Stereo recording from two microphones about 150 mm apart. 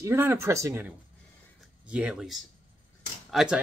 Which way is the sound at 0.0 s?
15° right (ahead or behind).